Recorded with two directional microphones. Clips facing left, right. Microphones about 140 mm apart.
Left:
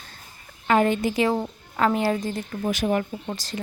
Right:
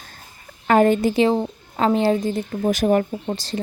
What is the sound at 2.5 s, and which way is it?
Speech, 40° right (ahead or behind).